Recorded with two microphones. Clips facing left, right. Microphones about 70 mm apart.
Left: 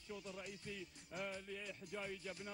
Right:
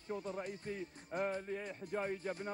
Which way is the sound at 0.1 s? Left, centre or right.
Right.